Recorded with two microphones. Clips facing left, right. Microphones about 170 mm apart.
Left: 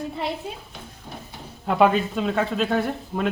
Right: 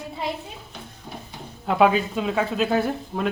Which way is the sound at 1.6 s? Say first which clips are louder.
Even; centre (ahead or behind).